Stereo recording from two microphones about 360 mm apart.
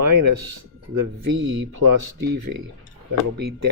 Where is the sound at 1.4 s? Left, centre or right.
Right.